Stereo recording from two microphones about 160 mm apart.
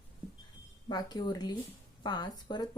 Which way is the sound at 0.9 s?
25° left (ahead or behind).